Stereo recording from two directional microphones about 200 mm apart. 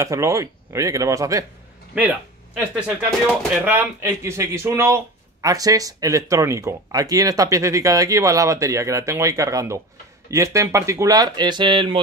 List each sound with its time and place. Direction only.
0.0 s speech: 15° right (ahead or behind)